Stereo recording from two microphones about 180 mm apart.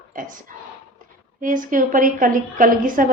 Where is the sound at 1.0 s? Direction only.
50° right (ahead or behind).